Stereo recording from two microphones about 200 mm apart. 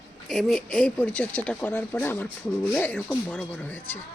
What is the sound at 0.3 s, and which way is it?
Speech, centre (ahead or behind).